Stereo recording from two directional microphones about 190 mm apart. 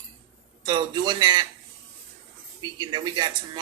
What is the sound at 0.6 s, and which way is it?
Cutlery, 25° right (ahead or behind).